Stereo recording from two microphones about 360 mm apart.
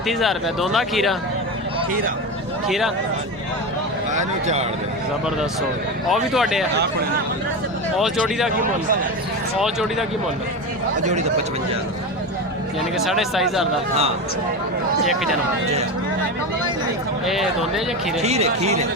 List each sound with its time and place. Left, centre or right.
0.1 s speech: centre
2.6 s speech: centre
4.1 s speech: centre
6.1 s speech: centre
7.9 s speech: centre
13.1 s speech: centre
15.0 s speech: centre
17.2 s speech: centre
18.2 s speech: centre